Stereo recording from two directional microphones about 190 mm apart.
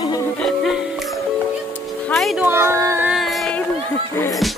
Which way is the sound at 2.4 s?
15° right (ahead or behind).